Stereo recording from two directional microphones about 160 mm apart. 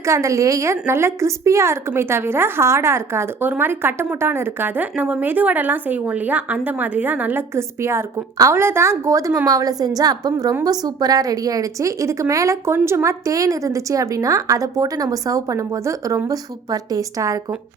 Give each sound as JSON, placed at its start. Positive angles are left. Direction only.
{"t": 0.0, "sound": "a woman's voice", "side_deg": -20}